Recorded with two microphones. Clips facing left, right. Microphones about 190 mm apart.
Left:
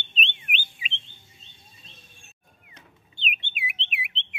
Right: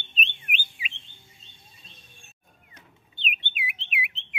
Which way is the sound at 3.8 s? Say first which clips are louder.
Right 2 dB; 30° left (ahead or behind).